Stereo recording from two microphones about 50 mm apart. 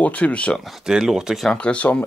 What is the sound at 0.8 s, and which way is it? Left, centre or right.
Speech, centre.